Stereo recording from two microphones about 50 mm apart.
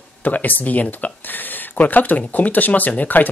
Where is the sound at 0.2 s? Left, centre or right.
Left.